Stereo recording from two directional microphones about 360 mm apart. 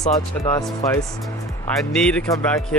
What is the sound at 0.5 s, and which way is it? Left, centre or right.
Speech, centre.